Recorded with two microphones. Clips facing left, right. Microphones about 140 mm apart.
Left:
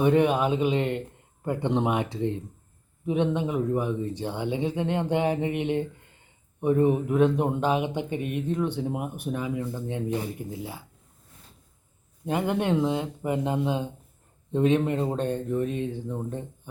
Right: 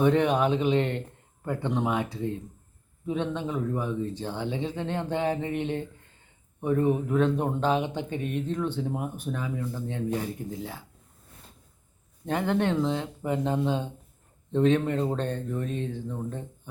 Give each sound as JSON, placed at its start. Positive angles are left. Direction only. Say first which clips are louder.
{"t": 0.0, "sound": "speech", "louder": "left 1 dB", "side_deg": 5}
{"t": 1.5, "sound": "speech", "louder": "left 3 dB", "side_deg": 20}
{"t": 12.2, "sound": "speech", "louder": "even", "side_deg": 10}